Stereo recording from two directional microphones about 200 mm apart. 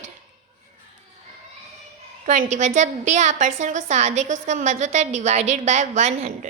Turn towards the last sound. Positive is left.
turn(degrees=-35)  # may be behind; listen again after turning